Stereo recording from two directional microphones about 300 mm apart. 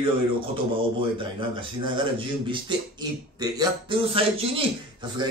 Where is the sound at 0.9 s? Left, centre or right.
Centre.